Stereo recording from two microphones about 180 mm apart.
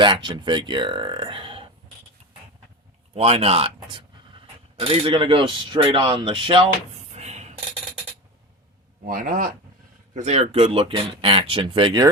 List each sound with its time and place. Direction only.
0.0 s a man's voice: 25° right (ahead or behind)
3.2 s a man's voice: 35° right (ahead or behind)
7.1 s a sound: 40° right (ahead or behind)
9.0 s speech: 50° right (ahead or behind)
10.2 s speech: 40° right (ahead or behind)